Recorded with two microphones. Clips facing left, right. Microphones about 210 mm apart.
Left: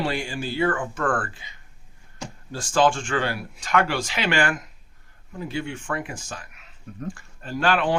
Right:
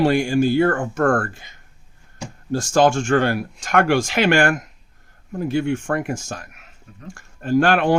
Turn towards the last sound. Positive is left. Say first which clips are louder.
# right 6 dB
turn(degrees=-45)  # may be behind; listen again after turning